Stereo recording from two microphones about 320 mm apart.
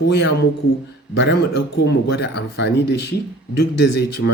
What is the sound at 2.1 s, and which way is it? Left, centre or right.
Speech, left.